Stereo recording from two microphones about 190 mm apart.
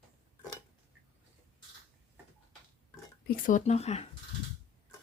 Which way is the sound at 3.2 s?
45° left (ahead or behind).